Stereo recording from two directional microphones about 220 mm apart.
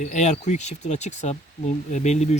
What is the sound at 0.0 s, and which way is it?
Speech, 35° left (ahead or behind).